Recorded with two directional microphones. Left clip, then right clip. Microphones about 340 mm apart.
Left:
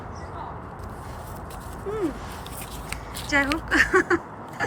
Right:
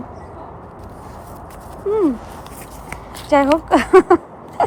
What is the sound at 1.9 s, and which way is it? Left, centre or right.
Speech, centre.